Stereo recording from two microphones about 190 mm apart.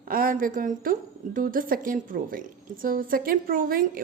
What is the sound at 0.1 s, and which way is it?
A woman's voice, 50° right (ahead or behind).